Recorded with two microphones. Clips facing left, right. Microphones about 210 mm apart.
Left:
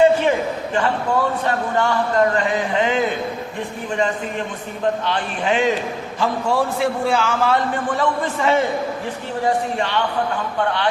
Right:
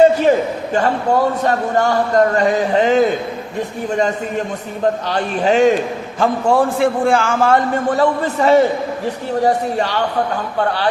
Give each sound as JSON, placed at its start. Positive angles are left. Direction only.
{"t": 0.0, "sound": "a sound", "side_deg": -40}
{"t": 1.1, "sound": "a man's voice", "side_deg": -40}
{"t": 5.0, "sound": "a man's voice", "side_deg": -40}